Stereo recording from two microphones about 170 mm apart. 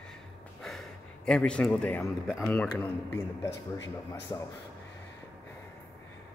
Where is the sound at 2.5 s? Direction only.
10° left (ahead or behind).